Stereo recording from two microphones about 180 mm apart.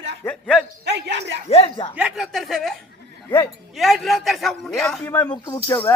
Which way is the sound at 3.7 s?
Centre (ahead or behind).